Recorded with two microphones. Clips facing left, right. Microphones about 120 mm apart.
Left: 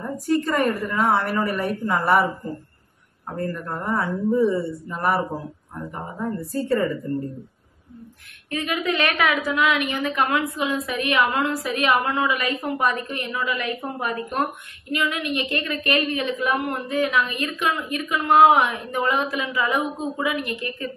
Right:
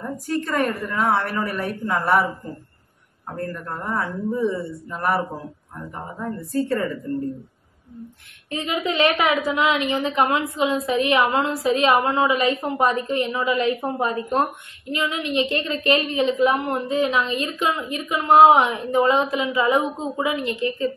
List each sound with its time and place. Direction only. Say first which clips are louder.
0.0 s speech: left 3 dB; centre (ahead or behind)
3.3 s speech: left 2 dB; 5° left (ahead or behind)
8.5 s speech: even; 25° right (ahead or behind)